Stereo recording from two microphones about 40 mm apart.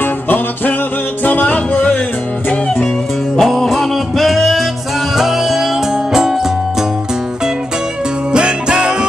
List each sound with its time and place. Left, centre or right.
0.0 s music: left
1.2 s music: left
3.3 s music: centre
8.3 s music: right